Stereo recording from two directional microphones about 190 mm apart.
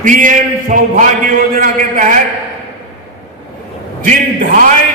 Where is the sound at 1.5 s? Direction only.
45° right (ahead or behind).